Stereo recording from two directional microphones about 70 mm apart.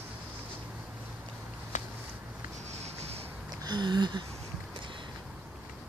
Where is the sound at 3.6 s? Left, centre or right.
Right.